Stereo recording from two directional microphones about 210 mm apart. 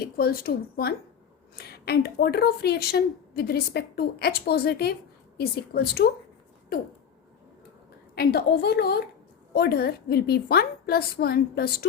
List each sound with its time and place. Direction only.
0.0 s a woman's voice: 45° left (ahead or behind)
8.1 s a woman's voice: 45° left (ahead or behind)